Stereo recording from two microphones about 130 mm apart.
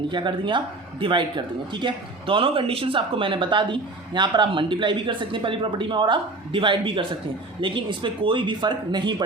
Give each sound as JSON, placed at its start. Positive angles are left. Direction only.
{"t": 0.1, "sound": "speech", "side_deg": -40}